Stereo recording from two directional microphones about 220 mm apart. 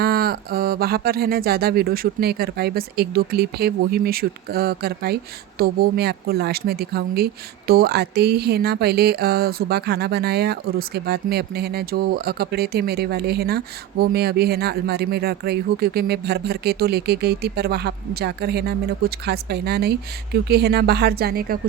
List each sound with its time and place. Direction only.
0.0 s speech: 45° right (ahead or behind)